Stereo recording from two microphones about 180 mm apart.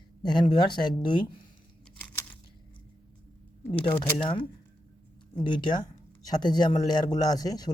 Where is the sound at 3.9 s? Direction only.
15° left (ahead or behind).